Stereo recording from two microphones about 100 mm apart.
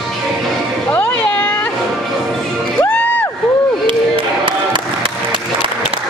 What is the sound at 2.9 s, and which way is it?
Crowd, 20° left (ahead or behind).